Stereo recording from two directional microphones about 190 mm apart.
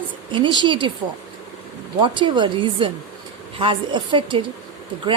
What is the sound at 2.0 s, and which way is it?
A woman's voice, 25° right (ahead or behind).